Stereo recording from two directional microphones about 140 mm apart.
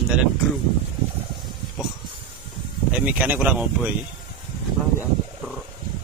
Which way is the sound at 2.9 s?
10° right (ahead or behind).